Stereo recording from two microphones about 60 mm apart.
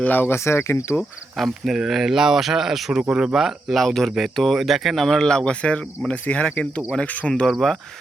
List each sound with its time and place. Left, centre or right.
0.0 s speech: left
0.3 s speech: left
0.9 s speech: centre; by 7.4 s left
7.6 s speech: centre